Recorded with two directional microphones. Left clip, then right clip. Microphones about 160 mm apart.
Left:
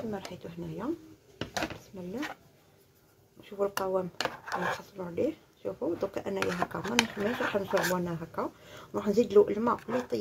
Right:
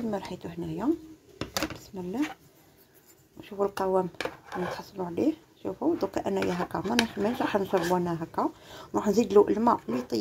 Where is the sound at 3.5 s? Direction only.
25° right (ahead or behind).